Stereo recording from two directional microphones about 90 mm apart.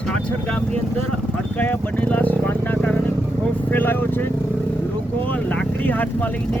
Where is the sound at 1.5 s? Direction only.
20° left (ahead or behind).